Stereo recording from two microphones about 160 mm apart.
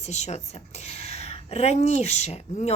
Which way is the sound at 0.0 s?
45° left (ahead or behind).